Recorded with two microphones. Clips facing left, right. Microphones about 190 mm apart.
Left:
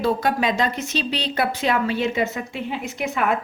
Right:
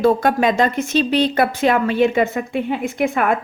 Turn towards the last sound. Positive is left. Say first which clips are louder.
# right 5 dB
turn(degrees=-50)  # may be behind; listen again after turning